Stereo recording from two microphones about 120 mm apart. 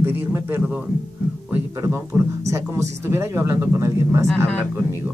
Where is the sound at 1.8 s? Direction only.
25° right (ahead or behind).